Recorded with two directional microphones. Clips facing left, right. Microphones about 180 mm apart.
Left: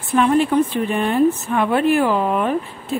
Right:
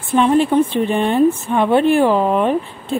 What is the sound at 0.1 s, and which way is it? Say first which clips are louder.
Speech: right 2 dB; 25° right (ahead or behind).